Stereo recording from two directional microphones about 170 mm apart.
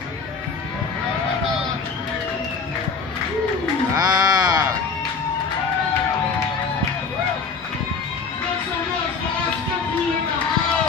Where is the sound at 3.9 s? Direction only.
25° right (ahead or behind).